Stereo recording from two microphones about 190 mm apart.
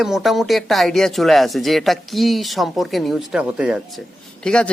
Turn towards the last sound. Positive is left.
turn(degrees=5)  # may be behind; listen again after turning